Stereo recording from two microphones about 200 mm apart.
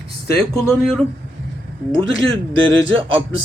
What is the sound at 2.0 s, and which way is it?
A man's voice, 25° right (ahead or behind).